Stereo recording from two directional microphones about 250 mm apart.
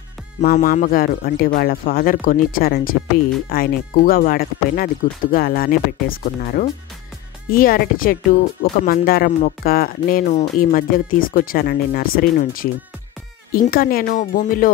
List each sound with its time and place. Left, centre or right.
0.4 s speech: left